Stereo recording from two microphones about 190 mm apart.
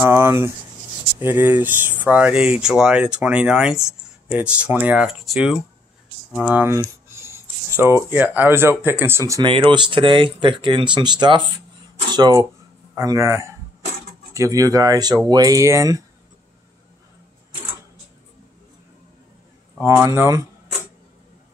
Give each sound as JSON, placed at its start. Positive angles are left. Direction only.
{"t": 0.0, "sound": "speech", "side_deg": -15}
{"t": 19.8, "sound": "speech", "side_deg": -15}